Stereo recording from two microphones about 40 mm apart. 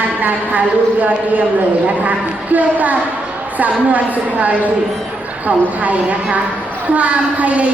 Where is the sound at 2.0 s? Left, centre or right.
Right.